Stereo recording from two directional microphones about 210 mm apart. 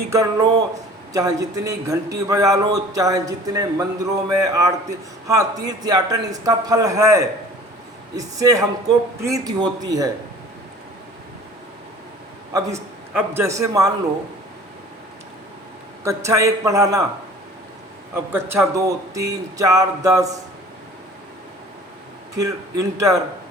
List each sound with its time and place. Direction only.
0.1 s a man's voice: 15° right (ahead or behind)
12.5 s a man's voice: 15° right (ahead or behind)
16.0 s a man's voice: 15° right (ahead or behind)
18.1 s a man's voice: 10° right (ahead or behind)
22.4 s a man's voice: 15° right (ahead or behind)